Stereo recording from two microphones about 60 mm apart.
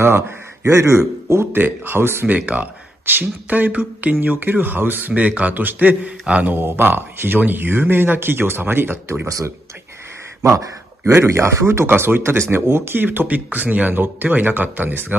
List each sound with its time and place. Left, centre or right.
0.7 s a man's voice: right
1.5 s speech: right
2.2 s speech: right
10.4 s a man's voice: right
11.1 s speech: right